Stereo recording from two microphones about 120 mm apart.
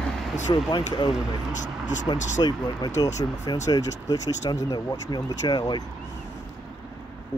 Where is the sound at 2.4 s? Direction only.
40° left (ahead or behind).